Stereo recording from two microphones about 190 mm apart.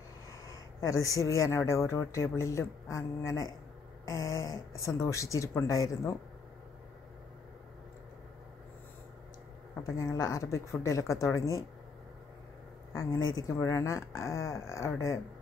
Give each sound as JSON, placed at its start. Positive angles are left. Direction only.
{"t": 0.7, "sound": "speech", "side_deg": 15}
{"t": 9.9, "sound": "speech", "side_deg": 20}
{"t": 12.9, "sound": "speech", "side_deg": 20}